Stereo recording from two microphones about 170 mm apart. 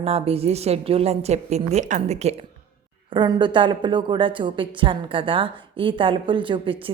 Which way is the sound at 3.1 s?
30° right (ahead or behind).